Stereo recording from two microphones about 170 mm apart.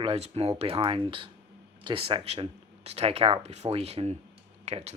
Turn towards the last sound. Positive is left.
turn(degrees=-40)  # may be behind; listen again after turning